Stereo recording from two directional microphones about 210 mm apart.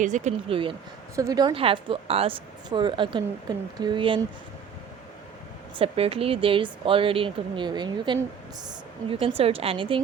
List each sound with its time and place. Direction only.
0.0 s a woman's voice: 35° right (ahead or behind)
5.7 s a woman's voice: 25° right (ahead or behind)
9.2 s a woman's voice: 25° right (ahead or behind)